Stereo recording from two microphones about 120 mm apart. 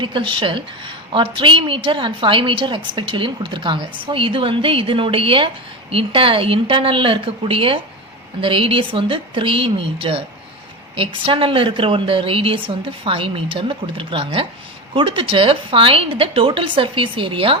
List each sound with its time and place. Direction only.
0.0 s a woman's voice: 45° right (ahead or behind)